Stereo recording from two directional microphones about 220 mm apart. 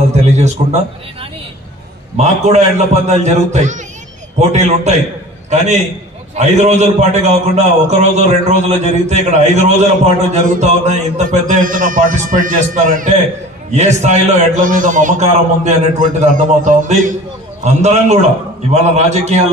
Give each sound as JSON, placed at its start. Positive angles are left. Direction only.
{"t": 0.1, "sound": "a man's voice", "side_deg": -30}
{"t": 2.1, "sound": "a man's voice", "side_deg": -30}